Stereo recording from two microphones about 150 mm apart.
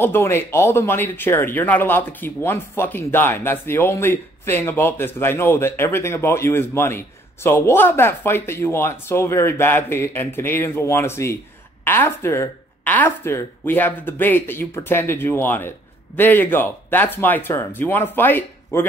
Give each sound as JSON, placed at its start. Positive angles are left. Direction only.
{"t": 0.0, "sound": "speech", "side_deg": 15}